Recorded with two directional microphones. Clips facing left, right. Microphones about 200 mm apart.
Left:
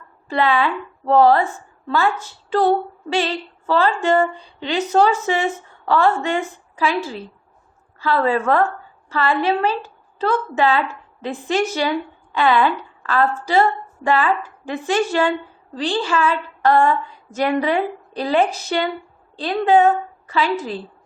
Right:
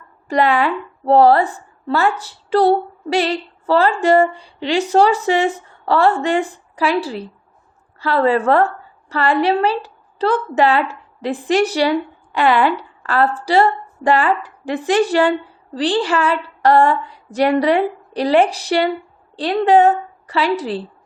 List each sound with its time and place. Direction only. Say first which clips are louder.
0.3 s a woman's voice: right 3 dB; 40° right (ahead or behind)
2.6 s a woman's voice: right 3 dB; 35° right (ahead or behind)